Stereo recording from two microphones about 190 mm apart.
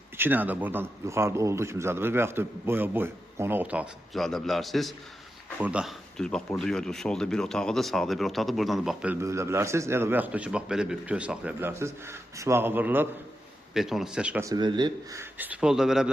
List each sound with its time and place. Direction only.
0.2 s a man's voice: 10° right (ahead or behind)
9.2 s a man's voice: 15° right (ahead or behind)
14.4 s speech: 20° right (ahead or behind)
15.2 s speech: 10° right (ahead or behind)